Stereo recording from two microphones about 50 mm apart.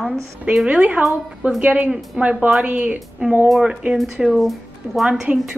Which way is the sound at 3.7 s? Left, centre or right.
Centre.